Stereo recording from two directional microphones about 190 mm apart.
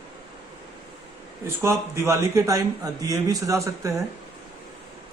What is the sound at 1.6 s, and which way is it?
Speech, 15° right (ahead or behind).